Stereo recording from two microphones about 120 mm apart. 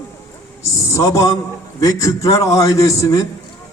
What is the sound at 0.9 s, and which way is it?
A man's voice, 30° left (ahead or behind).